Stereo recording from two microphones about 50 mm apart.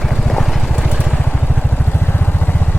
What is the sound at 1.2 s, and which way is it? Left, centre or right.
Vehicle, left.